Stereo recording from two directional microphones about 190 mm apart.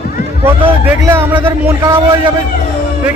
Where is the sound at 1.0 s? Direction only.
10° right (ahead or behind).